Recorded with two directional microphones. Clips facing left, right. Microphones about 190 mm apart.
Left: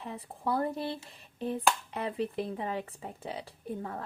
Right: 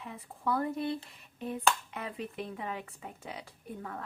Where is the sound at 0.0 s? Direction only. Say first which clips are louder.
Left 1 dB; 30° left (ahead or behind).